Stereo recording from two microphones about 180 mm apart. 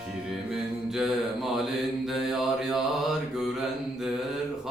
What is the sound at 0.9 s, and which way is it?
Mantra, centre (ahead or behind).